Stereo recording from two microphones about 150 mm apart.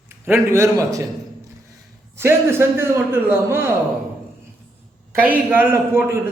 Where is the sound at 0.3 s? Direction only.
15° right (ahead or behind).